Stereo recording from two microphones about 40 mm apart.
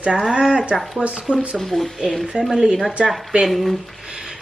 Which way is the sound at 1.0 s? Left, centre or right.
Right.